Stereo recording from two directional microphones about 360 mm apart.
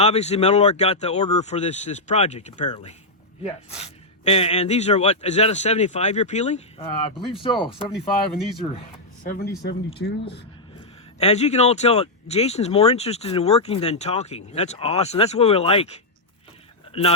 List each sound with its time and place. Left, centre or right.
0.0 s speech: centre